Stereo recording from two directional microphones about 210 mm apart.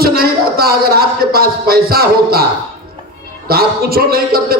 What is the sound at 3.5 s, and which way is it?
A man's voice, 45° right (ahead or behind).